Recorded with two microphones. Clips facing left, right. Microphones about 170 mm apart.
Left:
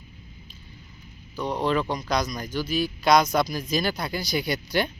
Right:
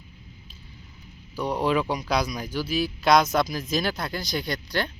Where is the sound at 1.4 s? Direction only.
10° right (ahead or behind).